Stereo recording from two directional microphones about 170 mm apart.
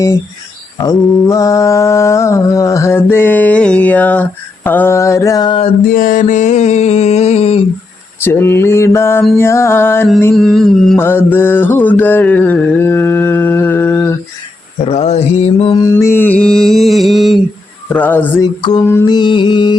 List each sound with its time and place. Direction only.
0.8 s mantra: 20° left (ahead or behind)
5.9 s a sound: 55° left (ahead or behind); by 7.6 s 40° left (ahead or behind)
8.2 s mantra: 15° left (ahead or behind)
10.3 s a sound: centre (ahead or behind)
10.9 s mantra: 10° left (ahead or behind)
14.8 s mantra: 40° left (ahead or behind)
15.7 s mantra: 20° left (ahead or behind); by 17.4 s centre (ahead or behind)
17.9 s speech: 10° left (ahead or behind)
18.9 s music: 20° left (ahead or behind)